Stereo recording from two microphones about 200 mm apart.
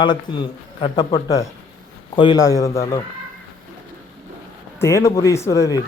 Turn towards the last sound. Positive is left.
turn(degrees=15)  # may be behind; listen again after turning